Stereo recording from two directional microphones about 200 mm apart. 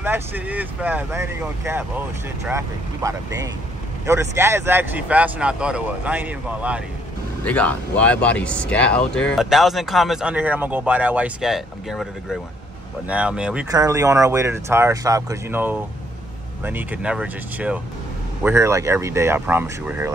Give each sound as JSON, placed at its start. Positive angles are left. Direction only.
{"t": 0.0, "sound": "speech", "side_deg": -10}
{"t": 7.4, "sound": "speech", "side_deg": 5}
{"t": 13.7, "sound": "speech", "side_deg": -15}